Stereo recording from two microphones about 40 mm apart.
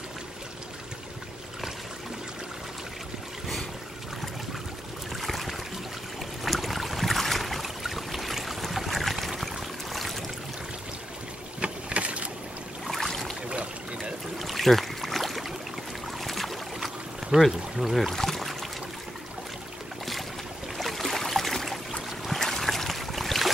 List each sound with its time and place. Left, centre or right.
5.1 s boat: centre
9.4 s a sound: centre
11.6 s boat: right
12.8 s boat: centre
13.5 s boat: right
14.4 s boat: centre
17.3 s pour: right
17.7 s speech: centre
18.1 s boat: centre
20.7 s boat: centre
22.4 s a sound: centre